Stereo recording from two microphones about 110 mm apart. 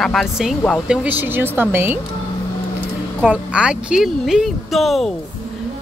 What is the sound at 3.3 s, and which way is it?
Speech, 10° right (ahead or behind).